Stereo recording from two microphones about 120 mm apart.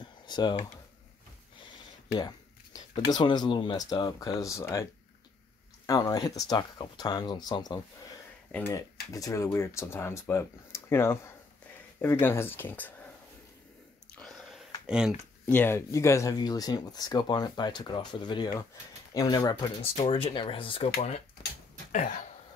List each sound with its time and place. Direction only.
0.0 s computer keyboard: 40° left (ahead or behind)
2.1 s speech: 35° left (ahead or behind)
5.9 s speech: 30° left (ahead or behind)
8.5 s speech: 15° left (ahead or behind)
8.7 s speech: 30° left (ahead or behind)
14.1 s biting: 5° left (ahead or behind)
14.9 s speech: 5° right (ahead or behind)
15.4 s speech: 15° left (ahead or behind); by 19.7 s 35° left (ahead or behind)
20.1 s speech: 50° left (ahead or behind)